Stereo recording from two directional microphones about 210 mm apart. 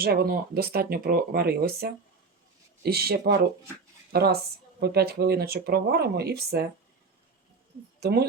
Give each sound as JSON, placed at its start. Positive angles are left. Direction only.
{"t": 0.0, "sound": "speech", "side_deg": -45}
{"t": 8.0, "sound": "speech", "side_deg": -50}